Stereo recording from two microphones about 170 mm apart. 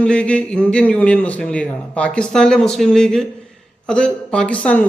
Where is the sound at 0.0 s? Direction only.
5° left (ahead or behind).